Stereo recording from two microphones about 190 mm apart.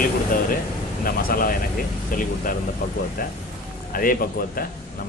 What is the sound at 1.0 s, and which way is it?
A man's voice, 50° left (ahead or behind).